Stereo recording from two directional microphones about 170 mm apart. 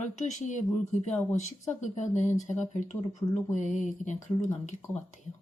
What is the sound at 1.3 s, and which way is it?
Speech, 45° left (ahead or behind).